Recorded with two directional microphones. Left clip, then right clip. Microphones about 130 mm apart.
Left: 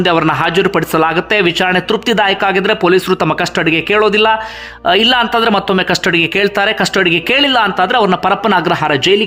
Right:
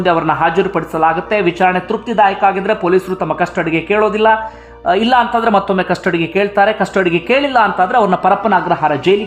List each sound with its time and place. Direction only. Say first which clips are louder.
0.0 s speech: left 1 dB; 15° left (ahead or behind)
1.6 s speech: even; 25° left (ahead or behind)
2.0 s speech: right 2 dB; 40° left (ahead or behind)
2.4 s speech: left 1 dB; 20° left (ahead or behind)
6.1 s speech: left 3 dB; 25° left (ahead or behind)